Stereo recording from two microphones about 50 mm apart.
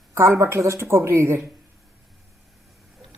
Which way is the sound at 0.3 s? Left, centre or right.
Right.